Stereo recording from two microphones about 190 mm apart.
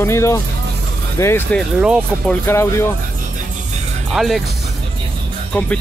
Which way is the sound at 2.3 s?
10° left (ahead or behind).